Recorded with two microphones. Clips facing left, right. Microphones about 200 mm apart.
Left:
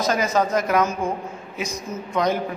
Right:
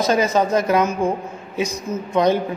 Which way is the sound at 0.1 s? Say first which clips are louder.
Right 4 dB; 25° right (ahead or behind).